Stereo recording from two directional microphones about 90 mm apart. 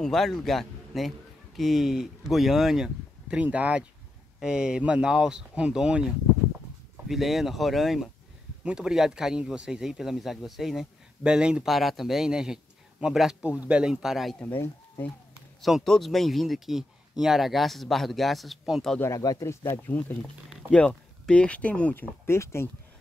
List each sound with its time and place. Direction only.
0.0 s a man's voice: 5° left (ahead or behind)
7.1 s speech: centre (ahead or behind)
14.4 s speech: 20° left (ahead or behind)
15.6 s speech: centre (ahead or behind)
18.9 s speech: 35° left (ahead or behind)
19.8 s speech: 20° left (ahead or behind)
22.2 s speech: 30° left (ahead or behind)